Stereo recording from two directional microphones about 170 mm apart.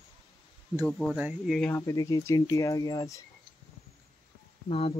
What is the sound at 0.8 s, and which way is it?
Speech, centre (ahead or behind).